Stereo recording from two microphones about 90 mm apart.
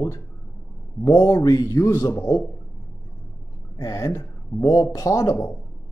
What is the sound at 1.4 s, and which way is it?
A man's voice, 40° left (ahead or behind).